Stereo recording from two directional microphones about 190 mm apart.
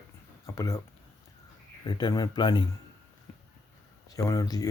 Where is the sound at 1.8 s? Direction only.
20° left (ahead or behind).